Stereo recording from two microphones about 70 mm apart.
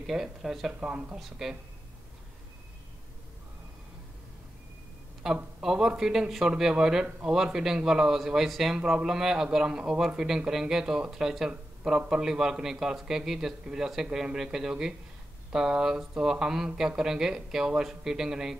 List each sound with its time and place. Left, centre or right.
0.0 s speech: centre
0.7 s a man's voice: centre
5.2 s a man's voice: centre